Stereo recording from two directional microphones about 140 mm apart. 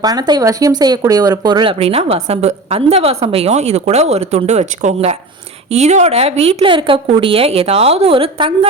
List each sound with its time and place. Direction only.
0.0 s speech: 30° right (ahead or behind)